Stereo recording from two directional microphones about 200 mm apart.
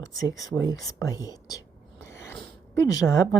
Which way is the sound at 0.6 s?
15° left (ahead or behind).